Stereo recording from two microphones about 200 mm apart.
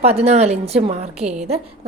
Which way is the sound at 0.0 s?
30° right (ahead or behind).